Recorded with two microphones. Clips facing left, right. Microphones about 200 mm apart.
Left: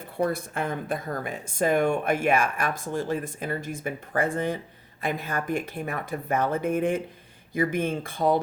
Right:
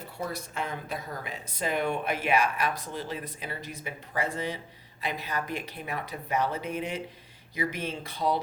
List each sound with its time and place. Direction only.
0.2 s speech: 55° left (ahead or behind)